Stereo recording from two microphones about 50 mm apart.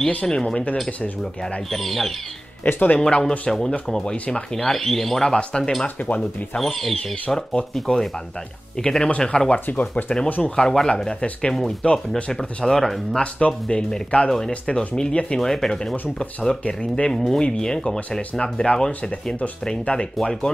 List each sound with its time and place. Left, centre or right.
0.3 s speech: centre
1.7 s speech: centre
2.6 s speech: left
3.0 s speech: centre
5.3 s speech: centre
5.6 s speech: centre
5.9 s speech: left
6.6 s speech: centre
9.7 s speech: left
10.0 s speech: left
12.6 s speech: centre
13.1 s speech: left
14.5 s speech: left